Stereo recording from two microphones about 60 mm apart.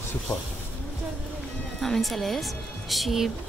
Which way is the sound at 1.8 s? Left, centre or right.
Centre.